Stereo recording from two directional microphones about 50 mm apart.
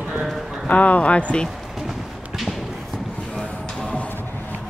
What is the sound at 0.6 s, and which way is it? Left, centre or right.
Speech, left.